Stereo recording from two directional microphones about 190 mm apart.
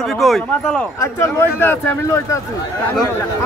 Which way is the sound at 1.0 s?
15° left (ahead or behind).